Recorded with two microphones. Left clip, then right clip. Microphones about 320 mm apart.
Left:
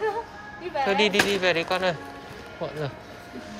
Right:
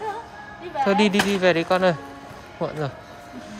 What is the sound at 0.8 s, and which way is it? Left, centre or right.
Speech, centre.